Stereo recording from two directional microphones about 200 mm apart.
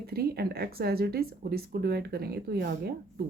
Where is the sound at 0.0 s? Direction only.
50° right (ahead or behind).